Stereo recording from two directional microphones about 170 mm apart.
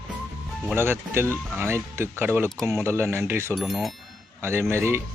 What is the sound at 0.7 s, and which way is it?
Speech, 15° right (ahead or behind).